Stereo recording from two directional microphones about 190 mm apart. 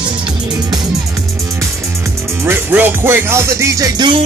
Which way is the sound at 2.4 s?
10° right (ahead or behind).